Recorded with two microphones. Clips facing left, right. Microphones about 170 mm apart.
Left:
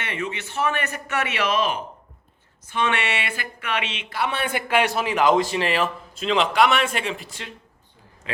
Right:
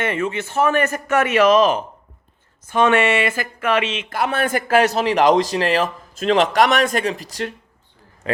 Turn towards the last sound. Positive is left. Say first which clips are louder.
# right 7 dB
turn(degrees=-40)  # may be behind; listen again after turning